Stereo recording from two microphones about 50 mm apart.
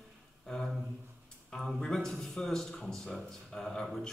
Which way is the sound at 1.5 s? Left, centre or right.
Centre.